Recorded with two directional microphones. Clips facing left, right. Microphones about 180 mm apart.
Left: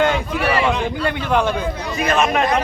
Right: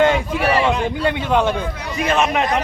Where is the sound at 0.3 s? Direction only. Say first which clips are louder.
Right 1 dB; 5° right (ahead or behind).